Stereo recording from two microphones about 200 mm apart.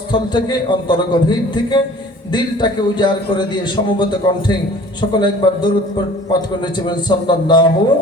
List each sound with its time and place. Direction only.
0.1 s a man's voice: 20° left (ahead or behind)
6.7 s a man's voice: 20° left (ahead or behind)